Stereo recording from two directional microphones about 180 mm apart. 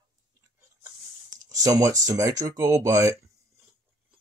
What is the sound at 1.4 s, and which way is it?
Speech, 20° right (ahead or behind).